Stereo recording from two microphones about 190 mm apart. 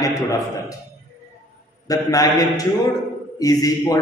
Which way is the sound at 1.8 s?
20° left (ahead or behind).